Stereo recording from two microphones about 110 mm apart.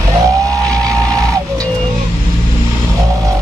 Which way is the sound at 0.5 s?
35° right (ahead or behind).